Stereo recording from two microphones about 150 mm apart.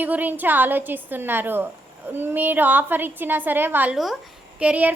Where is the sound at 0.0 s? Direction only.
10° right (ahead or behind).